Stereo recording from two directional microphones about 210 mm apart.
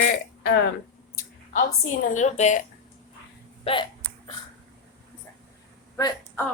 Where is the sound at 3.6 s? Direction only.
25° left (ahead or behind).